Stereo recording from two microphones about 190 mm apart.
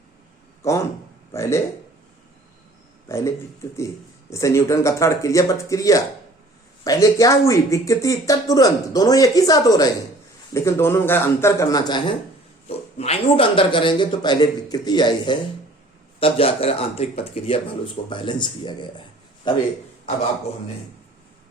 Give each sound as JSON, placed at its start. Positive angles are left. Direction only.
{"t": 0.6, "sound": "speech", "side_deg": 15}
{"t": 3.1, "sound": "speech", "side_deg": 15}